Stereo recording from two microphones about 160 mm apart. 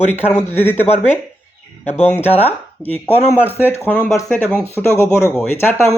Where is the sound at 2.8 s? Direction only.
10° left (ahead or behind).